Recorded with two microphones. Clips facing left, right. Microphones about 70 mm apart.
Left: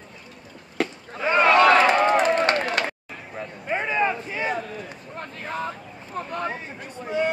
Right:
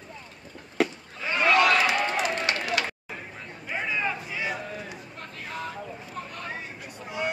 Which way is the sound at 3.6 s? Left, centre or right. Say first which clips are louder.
Left 6 dB; left.